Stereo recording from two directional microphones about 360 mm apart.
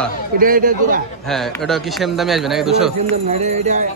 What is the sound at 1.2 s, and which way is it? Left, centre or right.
A man's voice, centre.